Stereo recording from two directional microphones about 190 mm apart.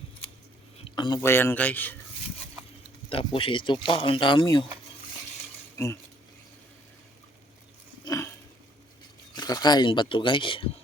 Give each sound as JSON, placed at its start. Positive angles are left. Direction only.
{"t": 0.9, "sound": "speech", "side_deg": 25}
{"t": 3.1, "sound": "speech", "side_deg": 30}
{"t": 5.7, "sound": "speech", "side_deg": 15}
{"t": 8.0, "sound": "a sound", "side_deg": 15}
{"t": 9.3, "sound": "speech", "side_deg": 20}